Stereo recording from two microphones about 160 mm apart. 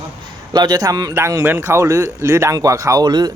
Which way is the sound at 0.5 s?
25° right (ahead or behind).